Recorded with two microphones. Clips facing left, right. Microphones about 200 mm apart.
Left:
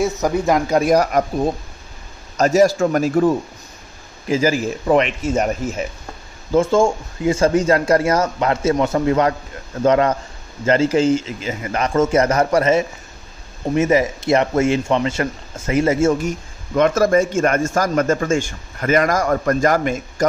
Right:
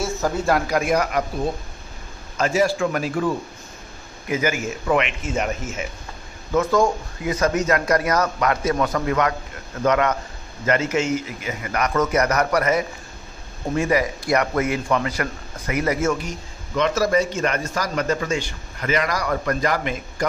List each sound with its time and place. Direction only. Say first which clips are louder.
0.0 s a man's voice: left 4 dB; 20° left (ahead or behind)
0.7 s a man's voice: left 5 dB; 40° left (ahead or behind)
2.3 s a man's voice: left 6 dB; 40° left (ahead or behind)
4.3 s a man's voice: left 5 dB; 30° left (ahead or behind)
6.5 s a man's voice: left 4 dB; 25° left (ahead or behind)
16.7 s a man's voice: left 5 dB; 50° left (ahead or behind)